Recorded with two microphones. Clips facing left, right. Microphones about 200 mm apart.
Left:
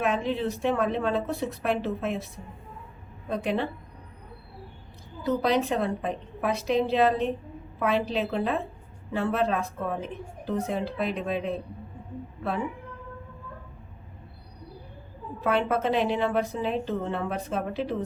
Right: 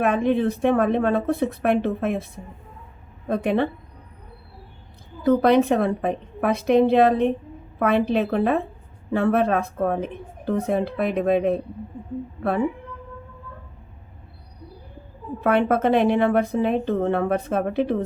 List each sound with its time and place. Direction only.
0.0 s a woman's voice: 55° right (ahead or behind)
5.2 s a woman's voice: 55° right (ahead or behind)
15.4 s a woman's voice: 60° right (ahead or behind)